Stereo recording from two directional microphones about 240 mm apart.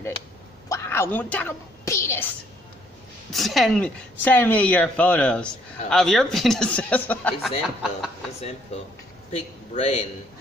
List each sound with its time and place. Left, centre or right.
0.7 s a woman's voice: centre
9.3 s speech: left